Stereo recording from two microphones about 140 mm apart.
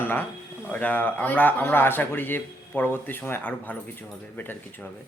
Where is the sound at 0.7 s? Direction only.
15° left (ahead or behind).